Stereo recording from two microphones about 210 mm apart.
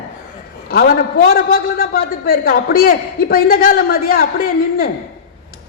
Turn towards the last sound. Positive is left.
turn(degrees=45)  # may be behind; listen again after turning